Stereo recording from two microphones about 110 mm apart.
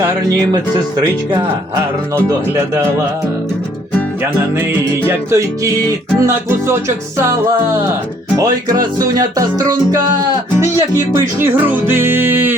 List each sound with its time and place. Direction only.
0.5 s music: 40° right (ahead or behind)
5.0 s music: 30° right (ahead or behind)
8.4 s music: 35° right (ahead or behind)